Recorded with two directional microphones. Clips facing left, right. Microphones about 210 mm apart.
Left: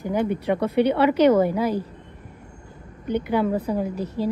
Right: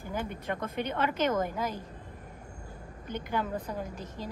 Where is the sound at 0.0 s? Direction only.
65° left (ahead or behind).